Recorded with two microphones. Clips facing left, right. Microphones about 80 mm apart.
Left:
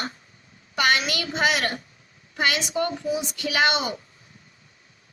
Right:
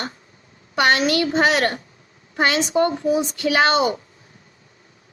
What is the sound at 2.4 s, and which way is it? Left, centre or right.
A child's voice, right.